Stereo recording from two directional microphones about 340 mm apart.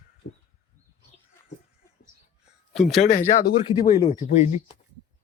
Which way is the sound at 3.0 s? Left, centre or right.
Left.